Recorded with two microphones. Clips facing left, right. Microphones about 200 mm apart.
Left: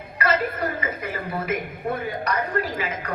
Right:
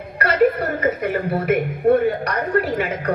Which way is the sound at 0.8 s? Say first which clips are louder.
Right 9 dB; 65° right (ahead or behind).